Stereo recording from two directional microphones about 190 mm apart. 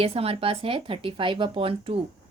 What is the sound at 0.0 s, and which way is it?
Speech, 30° right (ahead or behind).